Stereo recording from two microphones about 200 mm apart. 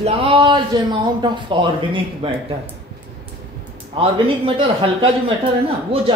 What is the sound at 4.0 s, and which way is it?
A man's voice, 25° right (ahead or behind).